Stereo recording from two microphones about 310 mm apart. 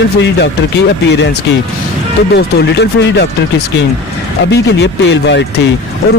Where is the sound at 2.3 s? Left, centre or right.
Left.